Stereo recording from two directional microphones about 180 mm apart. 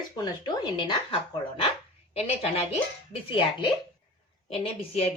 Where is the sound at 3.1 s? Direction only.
30° left (ahead or behind).